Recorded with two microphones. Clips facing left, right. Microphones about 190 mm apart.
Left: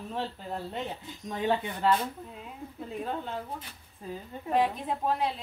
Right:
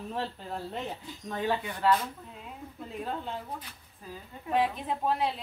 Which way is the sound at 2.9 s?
Centre (ahead or behind).